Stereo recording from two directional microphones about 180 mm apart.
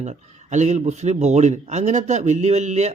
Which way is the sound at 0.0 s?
40° right (ahead or behind).